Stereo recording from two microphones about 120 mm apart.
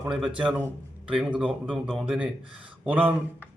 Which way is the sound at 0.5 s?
10° right (ahead or behind).